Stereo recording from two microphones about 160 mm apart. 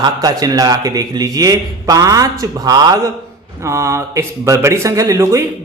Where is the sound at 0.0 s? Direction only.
25° right (ahead or behind).